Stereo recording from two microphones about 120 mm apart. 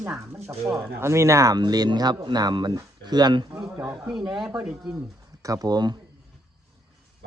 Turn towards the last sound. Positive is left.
turn(degrees=-35)  # may be behind; listen again after turning